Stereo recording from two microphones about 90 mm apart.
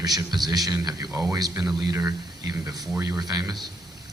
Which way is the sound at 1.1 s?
35° right (ahead or behind).